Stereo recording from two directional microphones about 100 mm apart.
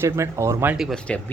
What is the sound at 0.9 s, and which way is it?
Speech, 15° left (ahead or behind).